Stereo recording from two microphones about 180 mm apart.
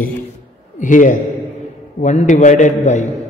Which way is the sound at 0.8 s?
45° left (ahead or behind).